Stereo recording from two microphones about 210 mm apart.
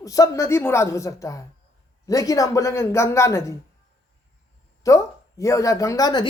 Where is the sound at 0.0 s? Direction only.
15° left (ahead or behind).